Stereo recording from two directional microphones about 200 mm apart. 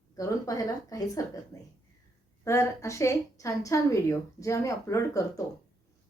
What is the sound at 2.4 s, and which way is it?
A woman's voice, 15° left (ahead or behind).